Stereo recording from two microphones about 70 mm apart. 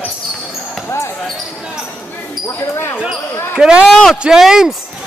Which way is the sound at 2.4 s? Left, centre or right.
Left.